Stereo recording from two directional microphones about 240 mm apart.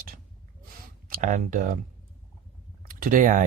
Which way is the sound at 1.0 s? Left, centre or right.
Right.